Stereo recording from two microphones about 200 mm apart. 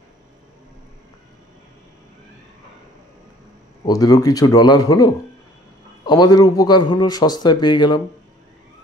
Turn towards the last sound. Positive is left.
turn(degrees=20)  # may be behind; listen again after turning